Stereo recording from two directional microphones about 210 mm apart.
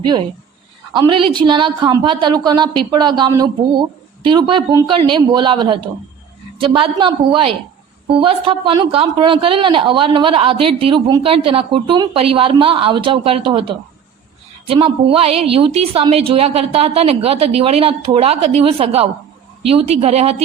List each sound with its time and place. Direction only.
0.9 s speech: 20° right (ahead or behind)